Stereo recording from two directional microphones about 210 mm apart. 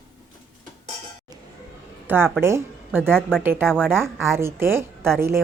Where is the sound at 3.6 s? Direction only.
5° left (ahead or behind).